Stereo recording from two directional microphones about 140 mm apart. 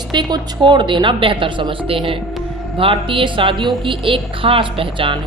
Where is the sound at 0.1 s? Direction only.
35° right (ahead or behind).